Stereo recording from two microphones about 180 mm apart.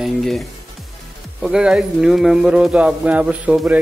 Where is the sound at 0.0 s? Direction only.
Centre (ahead or behind).